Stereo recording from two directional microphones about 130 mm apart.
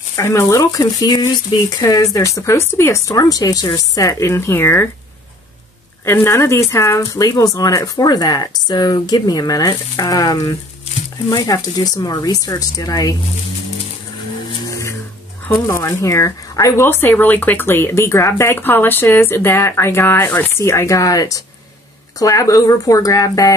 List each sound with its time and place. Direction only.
0.1 s speech: 25° left (ahead or behind)
6.0 s speech: 20° left (ahead or behind)
14.7 s a sound: 25° left (ahead or behind)
15.5 s speech: 25° left (ahead or behind)